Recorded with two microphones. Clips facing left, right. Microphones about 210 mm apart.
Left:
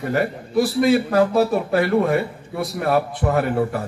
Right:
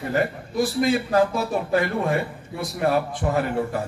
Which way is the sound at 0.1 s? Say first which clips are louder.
Left 4 dB; 60° left (ahead or behind).